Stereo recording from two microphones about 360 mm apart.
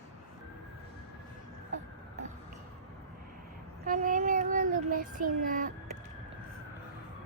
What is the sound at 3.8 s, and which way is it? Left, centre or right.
Child singing, right.